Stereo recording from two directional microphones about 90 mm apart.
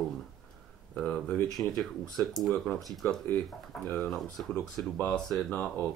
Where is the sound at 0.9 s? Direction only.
10° left (ahead or behind).